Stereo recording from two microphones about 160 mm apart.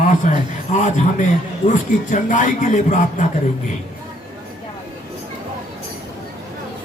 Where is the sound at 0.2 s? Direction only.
50° left (ahead or behind).